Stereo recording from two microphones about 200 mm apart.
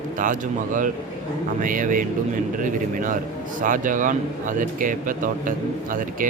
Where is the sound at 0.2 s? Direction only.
40° right (ahead or behind).